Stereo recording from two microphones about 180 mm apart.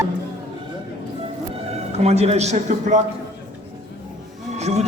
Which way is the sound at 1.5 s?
35° right (ahead or behind).